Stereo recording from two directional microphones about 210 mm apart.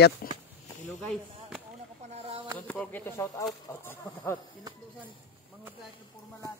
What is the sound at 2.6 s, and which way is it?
Speech, 5° left (ahead or behind).